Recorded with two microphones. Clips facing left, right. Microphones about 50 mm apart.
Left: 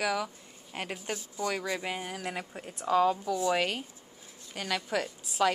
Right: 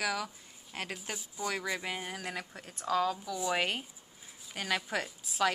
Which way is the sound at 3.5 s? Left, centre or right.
Centre.